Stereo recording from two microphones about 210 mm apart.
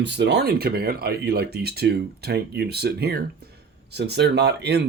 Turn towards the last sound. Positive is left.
turn(degrees=-50)  # may be behind; listen again after turning